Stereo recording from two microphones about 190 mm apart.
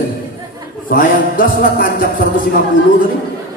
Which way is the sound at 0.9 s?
50° left (ahead or behind).